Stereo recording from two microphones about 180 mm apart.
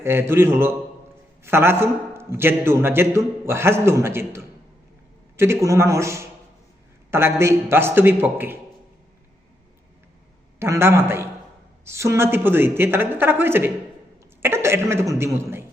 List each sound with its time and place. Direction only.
0.0 s a man's voice: 15° right (ahead or behind)
10.6 s a man's voice: 15° right (ahead or behind)